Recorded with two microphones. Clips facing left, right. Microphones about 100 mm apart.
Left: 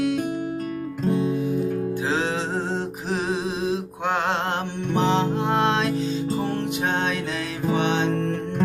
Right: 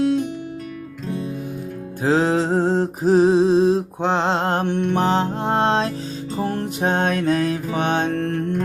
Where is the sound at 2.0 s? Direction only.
40° right (ahead or behind).